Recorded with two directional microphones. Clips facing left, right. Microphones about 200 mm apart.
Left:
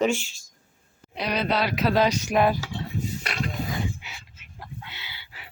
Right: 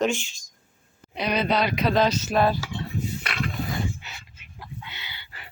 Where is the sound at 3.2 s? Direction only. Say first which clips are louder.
Even; 40° left (ahead or behind).